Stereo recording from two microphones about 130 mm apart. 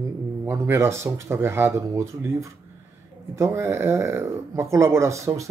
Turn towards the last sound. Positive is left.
turn(degrees=-25)  # may be behind; listen again after turning